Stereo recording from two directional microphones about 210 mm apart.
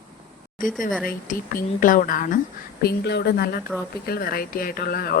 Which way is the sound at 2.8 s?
50° left (ahead or behind).